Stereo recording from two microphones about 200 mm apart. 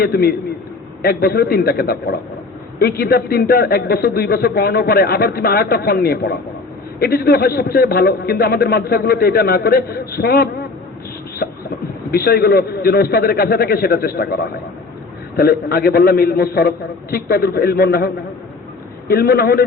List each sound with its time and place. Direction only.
0.0 s a man's voice: 50° left (ahead or behind)
11.4 s a sound: 50° left (ahead or behind)
12.1 s a man's voice: 50° left (ahead or behind)
15.4 s a man's voice: 50° left (ahead or behind)